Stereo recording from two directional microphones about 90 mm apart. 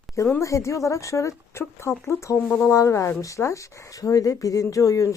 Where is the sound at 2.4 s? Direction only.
20° left (ahead or behind).